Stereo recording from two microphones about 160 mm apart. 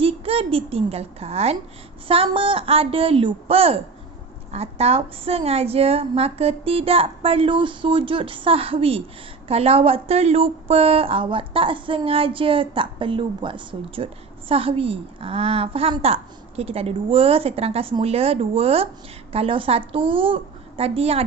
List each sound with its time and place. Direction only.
0.0 s a woman's voice: 35° right (ahead or behind)